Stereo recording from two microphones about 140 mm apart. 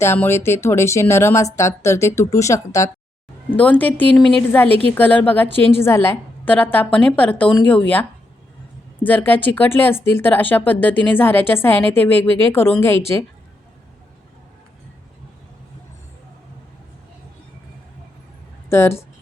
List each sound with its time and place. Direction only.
0.0 s speech: 15° left (ahead or behind)
3.6 s speech: 10° left (ahead or behind)
9.0 s speech: 15° left (ahead or behind)
18.7 s speech: 20° left (ahead or behind)